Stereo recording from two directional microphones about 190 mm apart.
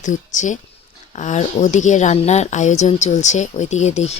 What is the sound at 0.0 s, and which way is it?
Speech, 40° left (ahead or behind).